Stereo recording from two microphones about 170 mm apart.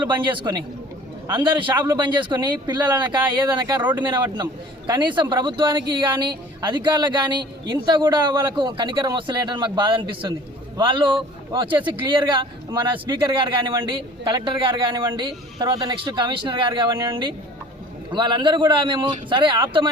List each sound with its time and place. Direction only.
0.3 s speech: 25° right (ahead or behind)
4.9 s speech: 25° right (ahead or behind)